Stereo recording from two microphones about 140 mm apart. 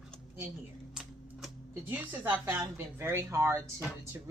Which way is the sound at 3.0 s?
15° right (ahead or behind).